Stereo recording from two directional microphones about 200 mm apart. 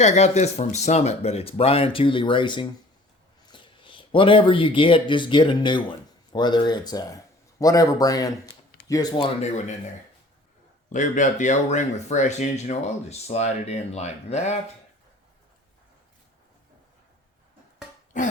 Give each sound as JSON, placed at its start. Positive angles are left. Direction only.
{"t": 0.0, "sound": "speech", "side_deg": 35}
{"t": 10.8, "sound": "speech", "side_deg": 40}
{"t": 18.1, "sound": "throat clearing", "side_deg": 40}